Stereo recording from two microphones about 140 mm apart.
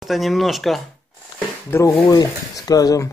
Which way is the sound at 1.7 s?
20° left (ahead or behind).